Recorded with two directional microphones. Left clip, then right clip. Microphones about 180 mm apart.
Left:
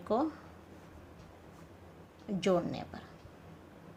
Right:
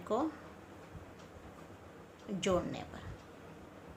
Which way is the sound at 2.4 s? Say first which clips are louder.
Left 3 dB; 25° left (ahead or behind).